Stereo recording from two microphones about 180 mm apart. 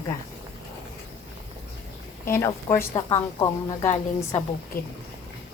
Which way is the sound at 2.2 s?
15° left (ahead or behind).